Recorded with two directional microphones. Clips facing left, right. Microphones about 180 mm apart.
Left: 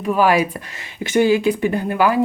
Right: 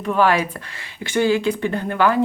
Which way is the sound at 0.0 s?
10° left (ahead or behind).